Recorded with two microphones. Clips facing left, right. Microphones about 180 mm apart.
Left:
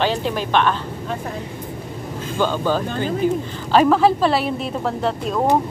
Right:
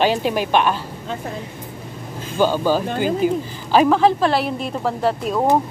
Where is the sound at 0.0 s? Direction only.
15° right (ahead or behind).